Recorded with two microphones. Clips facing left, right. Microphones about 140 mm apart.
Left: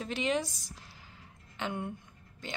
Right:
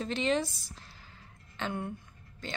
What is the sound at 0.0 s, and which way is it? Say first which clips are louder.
A woman's voice: right 2 dB; 10° left (ahead or behind).